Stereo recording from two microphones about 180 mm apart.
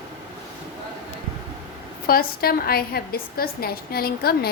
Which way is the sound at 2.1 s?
55° left (ahead or behind).